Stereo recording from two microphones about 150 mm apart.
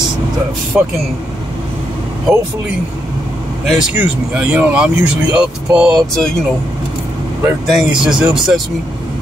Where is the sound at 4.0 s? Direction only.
10° right (ahead or behind).